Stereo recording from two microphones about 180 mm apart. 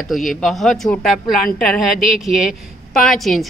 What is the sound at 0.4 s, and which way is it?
Speech, centre (ahead or behind).